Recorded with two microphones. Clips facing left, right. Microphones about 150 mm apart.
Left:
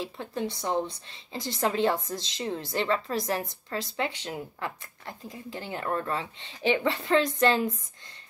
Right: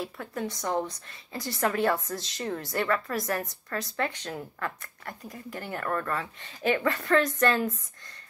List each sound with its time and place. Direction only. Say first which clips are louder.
0.0 s speech: left 1 dB; 25° left (ahead or behind)